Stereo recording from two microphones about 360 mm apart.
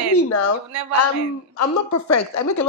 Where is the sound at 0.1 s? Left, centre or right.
Left.